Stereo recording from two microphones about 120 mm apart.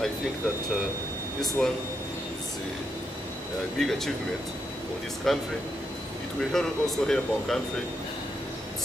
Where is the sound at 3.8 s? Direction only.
Centre (ahead or behind).